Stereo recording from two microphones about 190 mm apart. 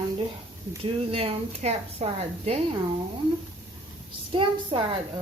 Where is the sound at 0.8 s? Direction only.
30° right (ahead or behind).